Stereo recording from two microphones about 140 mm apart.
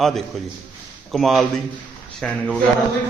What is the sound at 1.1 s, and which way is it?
Speech, centre (ahead or behind).